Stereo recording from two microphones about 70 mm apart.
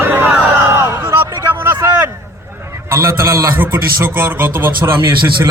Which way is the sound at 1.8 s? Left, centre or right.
Right.